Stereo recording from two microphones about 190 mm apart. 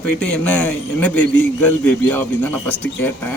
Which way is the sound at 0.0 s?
5° left (ahead or behind).